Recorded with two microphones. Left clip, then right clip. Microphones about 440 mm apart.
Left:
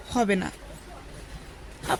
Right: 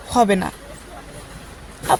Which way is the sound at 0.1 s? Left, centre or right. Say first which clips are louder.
Right 9 dB; left.